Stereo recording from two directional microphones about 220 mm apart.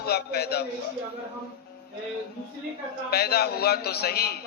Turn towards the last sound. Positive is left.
turn(degrees=45)  # may be behind; listen again after turning